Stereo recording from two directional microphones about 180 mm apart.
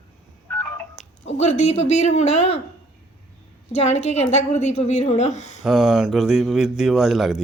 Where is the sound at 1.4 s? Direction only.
40° left (ahead or behind).